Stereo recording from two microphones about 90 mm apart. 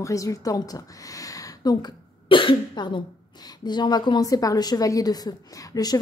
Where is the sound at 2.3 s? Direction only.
70° left (ahead or behind).